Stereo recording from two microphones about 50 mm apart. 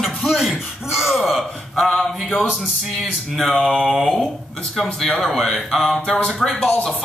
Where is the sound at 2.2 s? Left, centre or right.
Left.